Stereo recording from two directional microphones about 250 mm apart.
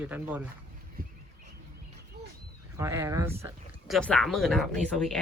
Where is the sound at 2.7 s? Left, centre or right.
Centre.